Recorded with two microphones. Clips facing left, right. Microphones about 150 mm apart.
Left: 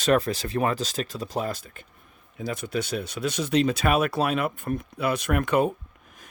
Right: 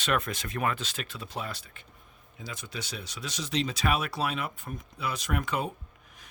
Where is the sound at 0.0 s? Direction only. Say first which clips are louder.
Left 8 dB; 35° left (ahead or behind); by 5.7 s 60° left (ahead or behind).